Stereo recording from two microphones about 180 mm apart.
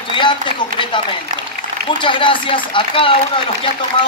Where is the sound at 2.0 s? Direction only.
30° left (ahead or behind).